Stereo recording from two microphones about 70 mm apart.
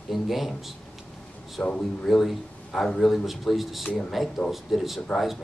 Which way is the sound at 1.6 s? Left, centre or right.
Centre.